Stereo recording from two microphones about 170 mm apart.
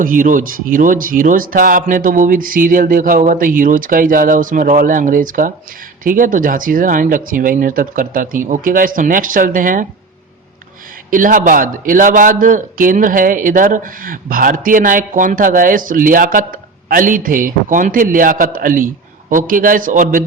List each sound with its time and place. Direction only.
0.0 s a man's voice: 55° right (ahead or behind)
11.1 s a man's voice: 50° right (ahead or behind)